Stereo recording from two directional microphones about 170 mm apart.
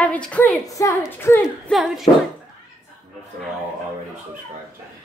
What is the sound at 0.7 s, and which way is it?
Speech, 20° left (ahead or behind).